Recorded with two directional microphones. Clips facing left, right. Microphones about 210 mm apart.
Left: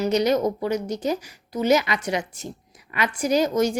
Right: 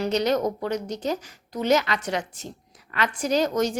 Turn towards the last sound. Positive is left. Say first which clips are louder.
# left 2 dB
turn(degrees=10)  # may be behind; listen again after turning